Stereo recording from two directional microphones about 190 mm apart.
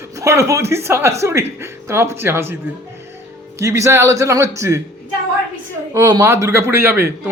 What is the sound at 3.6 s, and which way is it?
Speech, 15° right (ahead or behind).